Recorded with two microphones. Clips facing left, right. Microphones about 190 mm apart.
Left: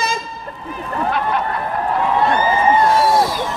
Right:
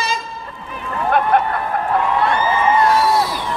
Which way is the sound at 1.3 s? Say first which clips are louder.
Right 5 dB; 55° right (ahead or behind).